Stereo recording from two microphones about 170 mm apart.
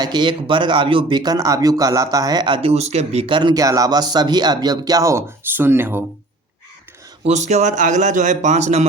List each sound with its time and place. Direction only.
0.0 s speech: 25° right (ahead or behind)
7.3 s a man's voice: 45° right (ahead or behind)